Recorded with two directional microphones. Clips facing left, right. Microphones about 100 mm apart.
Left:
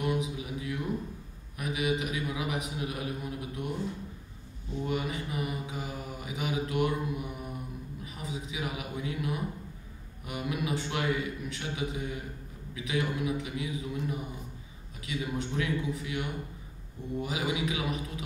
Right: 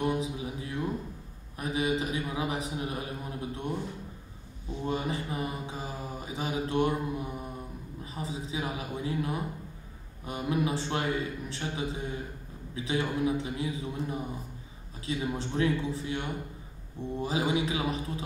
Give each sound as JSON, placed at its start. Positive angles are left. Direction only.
{"t": 0.0, "sound": "a sound", "side_deg": -30}
{"t": 4.8, "sound": "mantra", "side_deg": -30}
{"t": 8.0, "sound": "a man's voice", "side_deg": -30}